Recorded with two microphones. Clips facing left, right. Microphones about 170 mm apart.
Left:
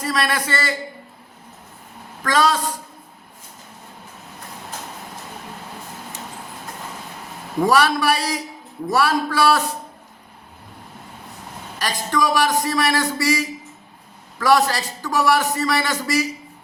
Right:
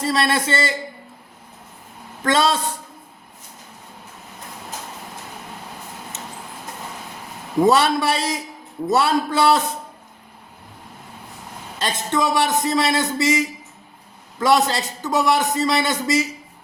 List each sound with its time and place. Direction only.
0.0 s a man's voice: 25° right (ahead or behind)
2.2 s a man's voice: 25° right (ahead or behind)
7.6 s a man's voice: 25° right (ahead or behind)
11.8 s a man's voice: 25° right (ahead or behind)